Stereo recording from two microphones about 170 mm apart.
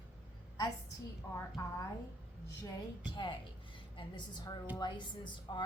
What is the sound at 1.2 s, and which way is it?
Speech, 15° left (ahead or behind).